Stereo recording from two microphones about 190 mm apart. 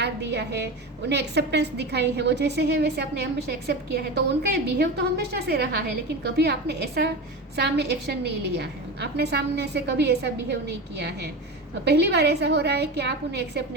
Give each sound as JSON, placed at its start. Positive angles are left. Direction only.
{"t": 0.0, "sound": "a woman's voice", "side_deg": -65}